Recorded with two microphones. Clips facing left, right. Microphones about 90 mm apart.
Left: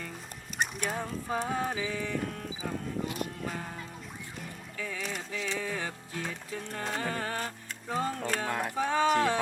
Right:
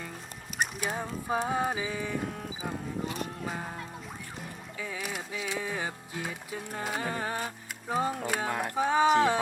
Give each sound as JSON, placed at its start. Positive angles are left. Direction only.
{"t": 0.6, "sound": "clip-clop", "side_deg": -5}
{"t": 2.6, "sound": "speech", "side_deg": -15}
{"t": 3.4, "sound": "clip-clop", "side_deg": -15}
{"t": 4.4, "sound": "music", "side_deg": -15}
{"t": 8.7, "sound": "speech", "side_deg": -15}